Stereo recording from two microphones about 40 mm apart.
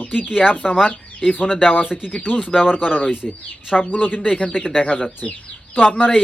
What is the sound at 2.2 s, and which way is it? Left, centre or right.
Speech, left.